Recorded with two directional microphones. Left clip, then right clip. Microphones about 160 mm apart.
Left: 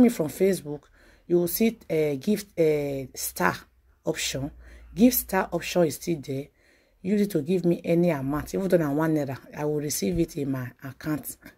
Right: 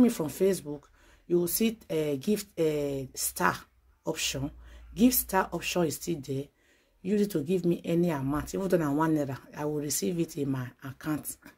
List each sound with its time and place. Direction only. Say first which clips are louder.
0.0 s speech: left 4 dB; 25° left (ahead or behind)